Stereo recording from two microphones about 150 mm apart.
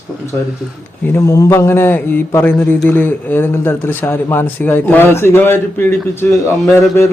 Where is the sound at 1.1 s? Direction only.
20° left (ahead or behind).